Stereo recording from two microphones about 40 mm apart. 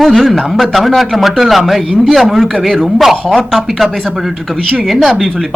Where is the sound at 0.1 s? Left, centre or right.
Centre.